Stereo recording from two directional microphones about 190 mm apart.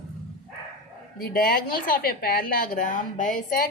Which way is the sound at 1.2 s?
50° left (ahead or behind).